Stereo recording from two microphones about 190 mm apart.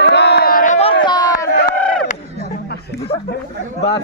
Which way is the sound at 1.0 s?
20° left (ahead or behind).